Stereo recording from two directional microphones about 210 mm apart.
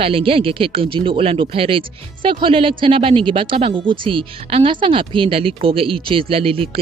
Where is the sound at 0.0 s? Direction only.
25° right (ahead or behind).